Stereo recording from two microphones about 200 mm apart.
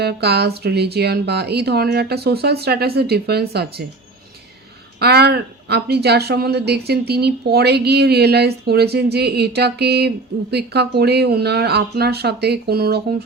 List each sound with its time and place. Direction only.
0.0 s a woman's voice: 55° right (ahead or behind)
4.9 s a woman's voice: 55° right (ahead or behind)